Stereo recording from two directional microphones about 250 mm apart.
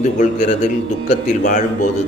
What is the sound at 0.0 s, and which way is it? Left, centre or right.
A man's voice, left.